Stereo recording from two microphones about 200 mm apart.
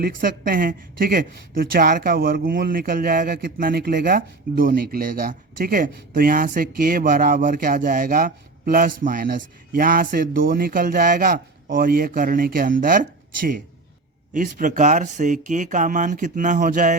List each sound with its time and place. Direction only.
0.0 s a woman's voice: 45° right (ahead or behind)